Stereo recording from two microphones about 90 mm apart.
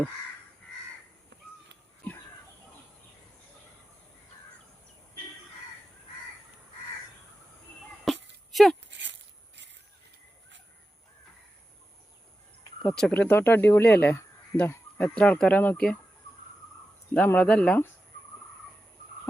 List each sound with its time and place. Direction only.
8.1 s a sound: centre (ahead or behind)
12.8 s speech: 5° left (ahead or behind)
13.1 s speech: 20° left (ahead or behind)
14.7 s a sound: 20° left (ahead or behind)
15.1 s speech: 10° left (ahead or behind)
17.2 s speech: 15° left (ahead or behind)